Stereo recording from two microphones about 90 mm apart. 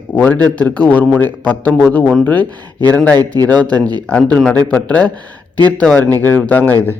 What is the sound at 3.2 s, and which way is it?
Speech, 45° right (ahead or behind).